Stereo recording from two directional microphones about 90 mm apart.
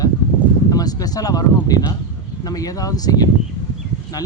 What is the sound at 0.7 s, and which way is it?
Speech, 45° left (ahead or behind).